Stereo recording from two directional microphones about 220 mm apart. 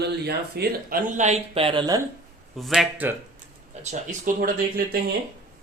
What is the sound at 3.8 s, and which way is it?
Speech, 35° right (ahead or behind).